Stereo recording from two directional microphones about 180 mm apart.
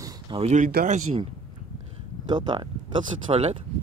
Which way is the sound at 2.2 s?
25° right (ahead or behind).